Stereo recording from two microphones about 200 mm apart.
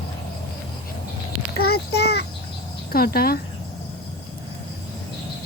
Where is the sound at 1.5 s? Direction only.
50° left (ahead or behind).